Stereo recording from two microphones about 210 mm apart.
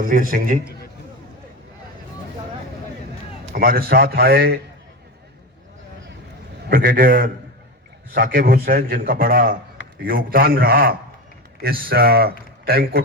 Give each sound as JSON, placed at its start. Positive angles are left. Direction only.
{"t": 0.0, "sound": "a man's voice", "side_deg": -40}
{"t": 3.5, "sound": "a man's voice", "side_deg": -45}
{"t": 6.7, "sound": "a man's voice", "side_deg": -40}